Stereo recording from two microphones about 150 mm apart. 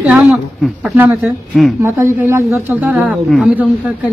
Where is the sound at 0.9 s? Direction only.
15° right (ahead or behind).